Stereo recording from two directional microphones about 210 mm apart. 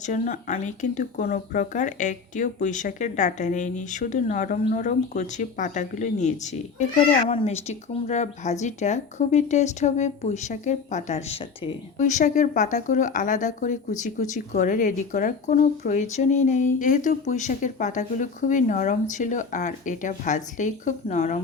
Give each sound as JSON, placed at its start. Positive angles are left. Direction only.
{"t": 0.0, "sound": "speech", "side_deg": 35}